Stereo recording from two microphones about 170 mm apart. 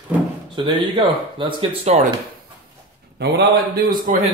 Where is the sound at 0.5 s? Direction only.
30° right (ahead or behind).